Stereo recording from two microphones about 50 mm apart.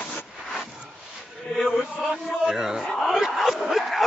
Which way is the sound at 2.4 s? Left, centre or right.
Centre.